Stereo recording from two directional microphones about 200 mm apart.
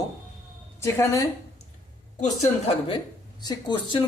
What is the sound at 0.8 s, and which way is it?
Speech, 15° left (ahead or behind).